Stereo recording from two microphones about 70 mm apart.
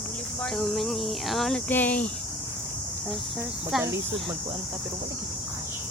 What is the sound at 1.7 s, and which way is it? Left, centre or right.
Speech, left.